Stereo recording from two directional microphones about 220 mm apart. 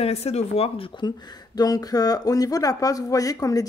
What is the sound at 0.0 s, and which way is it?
Speech, 30° left (ahead or behind).